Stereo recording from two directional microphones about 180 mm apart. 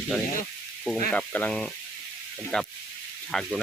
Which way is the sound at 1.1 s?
10° left (ahead or behind).